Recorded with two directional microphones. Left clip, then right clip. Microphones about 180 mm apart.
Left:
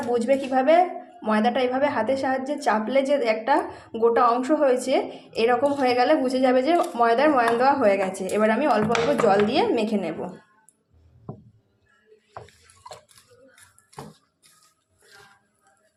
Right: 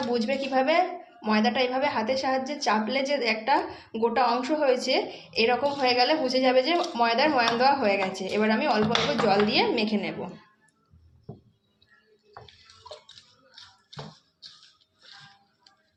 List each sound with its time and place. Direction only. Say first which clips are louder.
0.1 s a woman's voice: left 7 dB; 40° left (ahead or behind)